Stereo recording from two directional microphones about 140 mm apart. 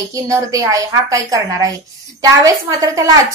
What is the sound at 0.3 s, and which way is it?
A woman's voice, 25° right (ahead or behind).